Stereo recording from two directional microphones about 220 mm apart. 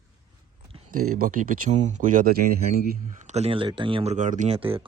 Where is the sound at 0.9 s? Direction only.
35° right (ahead or behind).